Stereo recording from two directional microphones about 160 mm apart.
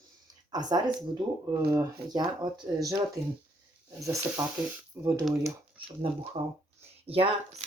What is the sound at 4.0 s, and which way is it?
Speech, 15° right (ahead or behind).